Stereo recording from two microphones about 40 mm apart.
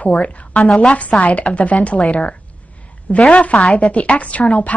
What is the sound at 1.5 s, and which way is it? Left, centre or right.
A woman's voice, left.